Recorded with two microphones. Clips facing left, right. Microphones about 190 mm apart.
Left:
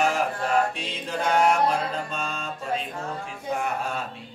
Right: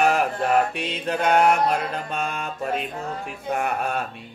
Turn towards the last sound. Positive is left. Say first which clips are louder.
# right 3 dB
turn(degrees=-60)  # may be behind; listen again after turning